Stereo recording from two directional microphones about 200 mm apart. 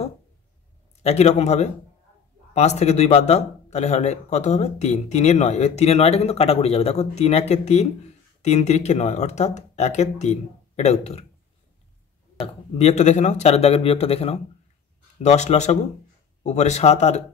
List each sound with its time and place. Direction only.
1.0 s speech: 35° left (ahead or behind)
12.7 s speech: 35° left (ahead or behind)